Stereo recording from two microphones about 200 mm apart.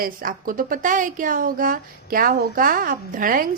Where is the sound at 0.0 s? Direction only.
45° right (ahead or behind).